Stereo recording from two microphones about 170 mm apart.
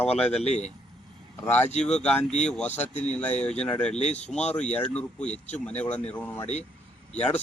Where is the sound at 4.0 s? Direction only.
40° left (ahead or behind).